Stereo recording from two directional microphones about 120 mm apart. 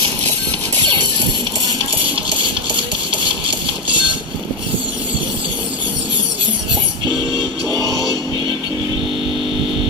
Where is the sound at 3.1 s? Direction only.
45° right (ahead or behind).